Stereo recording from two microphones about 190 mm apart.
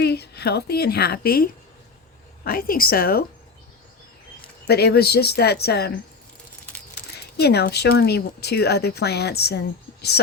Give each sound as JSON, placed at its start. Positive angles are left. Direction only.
{"t": 0.0, "sound": "a woman's voice", "side_deg": 60}
{"t": 4.6, "sound": "speech", "side_deg": 60}
{"t": 6.7, "sound": "bird", "side_deg": 10}
{"t": 7.3, "sound": "speech", "side_deg": 60}